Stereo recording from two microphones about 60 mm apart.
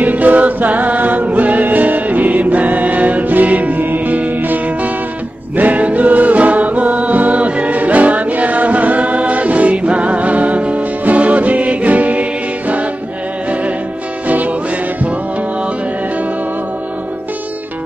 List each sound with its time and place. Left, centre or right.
0.0 s music: right
14.2 s music: right